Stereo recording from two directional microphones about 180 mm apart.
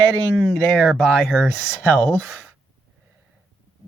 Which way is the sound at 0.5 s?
5° left (ahead or behind).